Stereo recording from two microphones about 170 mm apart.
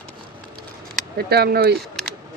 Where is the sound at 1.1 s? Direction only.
70° right (ahead or behind).